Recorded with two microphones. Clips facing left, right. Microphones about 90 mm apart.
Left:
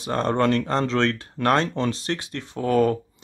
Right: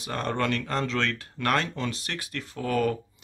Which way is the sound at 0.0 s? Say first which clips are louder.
Left 7 dB; 30° left (ahead or behind).